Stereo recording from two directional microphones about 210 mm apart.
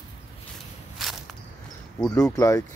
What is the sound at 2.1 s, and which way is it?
Speech, 15° left (ahead or behind).